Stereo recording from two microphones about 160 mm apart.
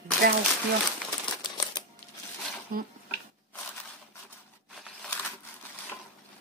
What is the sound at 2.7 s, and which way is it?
Speech, 65° right (ahead or behind).